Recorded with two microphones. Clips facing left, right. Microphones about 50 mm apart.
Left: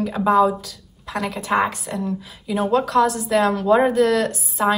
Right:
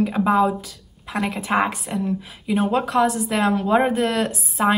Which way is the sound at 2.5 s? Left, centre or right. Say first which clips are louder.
Left 1 dB; right.